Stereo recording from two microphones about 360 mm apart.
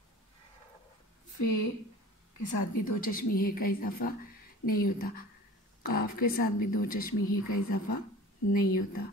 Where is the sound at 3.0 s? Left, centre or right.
Left.